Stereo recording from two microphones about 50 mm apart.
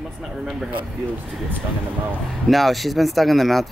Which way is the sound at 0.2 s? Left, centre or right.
Centre.